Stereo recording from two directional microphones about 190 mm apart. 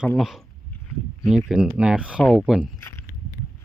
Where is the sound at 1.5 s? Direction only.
5° right (ahead or behind).